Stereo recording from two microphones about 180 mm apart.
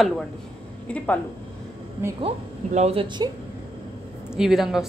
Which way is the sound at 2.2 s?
35° right (ahead or behind).